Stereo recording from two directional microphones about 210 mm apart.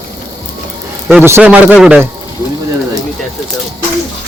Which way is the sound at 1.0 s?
5° right (ahead or behind).